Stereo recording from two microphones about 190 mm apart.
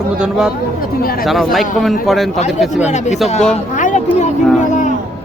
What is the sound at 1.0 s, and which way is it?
Speech, 50° left (ahead or behind).